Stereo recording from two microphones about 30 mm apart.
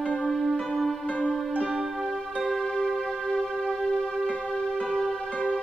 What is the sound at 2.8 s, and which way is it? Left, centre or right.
Music, centre.